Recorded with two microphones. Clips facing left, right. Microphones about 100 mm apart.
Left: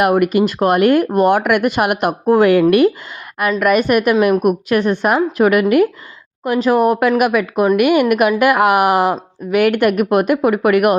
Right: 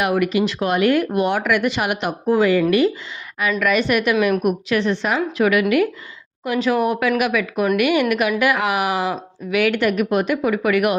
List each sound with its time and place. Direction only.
0.0 s speech: 50° left (ahead or behind)